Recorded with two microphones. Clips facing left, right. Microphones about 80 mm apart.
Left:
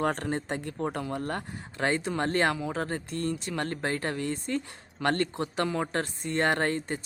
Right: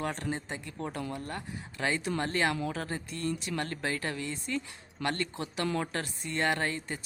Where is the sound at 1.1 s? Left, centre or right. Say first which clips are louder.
Left 5 dB; left.